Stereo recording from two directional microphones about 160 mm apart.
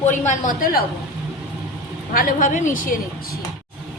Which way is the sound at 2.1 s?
55° left (ahead or behind).